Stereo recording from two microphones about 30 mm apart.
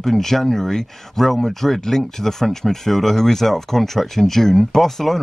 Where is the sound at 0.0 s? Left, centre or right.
Centre.